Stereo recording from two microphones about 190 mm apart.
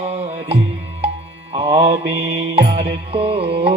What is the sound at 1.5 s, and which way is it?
Mantra, 35° right (ahead or behind).